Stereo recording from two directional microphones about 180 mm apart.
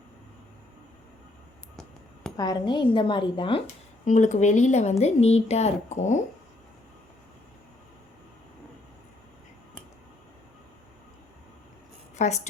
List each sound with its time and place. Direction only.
2.3 s speech: 20° left (ahead or behind)
4.0 s speech: 45° left (ahead or behind)
12.1 s a sound: 40° left (ahead or behind)